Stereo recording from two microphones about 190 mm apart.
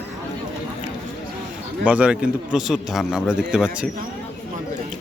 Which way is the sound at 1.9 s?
5° right (ahead or behind).